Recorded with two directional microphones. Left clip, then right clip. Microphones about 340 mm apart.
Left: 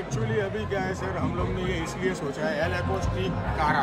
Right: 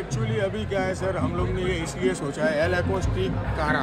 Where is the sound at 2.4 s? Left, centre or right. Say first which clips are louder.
Right 5 dB; centre.